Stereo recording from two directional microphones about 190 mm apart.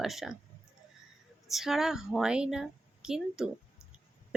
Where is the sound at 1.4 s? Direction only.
Centre (ahead or behind).